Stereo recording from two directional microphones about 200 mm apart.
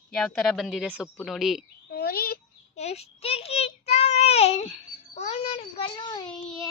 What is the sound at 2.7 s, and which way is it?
Child singing, 35° left (ahead or behind).